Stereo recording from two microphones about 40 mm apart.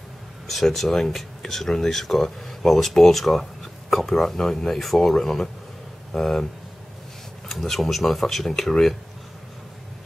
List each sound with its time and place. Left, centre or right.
0.5 s speech: centre
7.6 s speech: centre